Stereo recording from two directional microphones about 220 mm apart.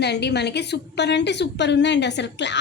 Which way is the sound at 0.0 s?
50° left (ahead or behind).